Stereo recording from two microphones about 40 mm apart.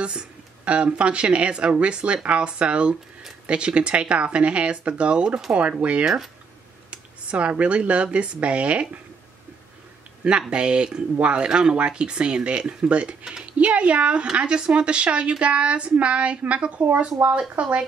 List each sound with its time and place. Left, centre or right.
0.7 s a woman's voice: right
10.5 s a woman's voice: right
11.4 s a woman's voice: centre
13.2 s speech: centre
13.5 s a woman's voice: right
17.2 s speech: right
17.6 s speech: right